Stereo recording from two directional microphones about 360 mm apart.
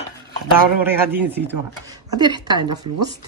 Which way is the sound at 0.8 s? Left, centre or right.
Centre.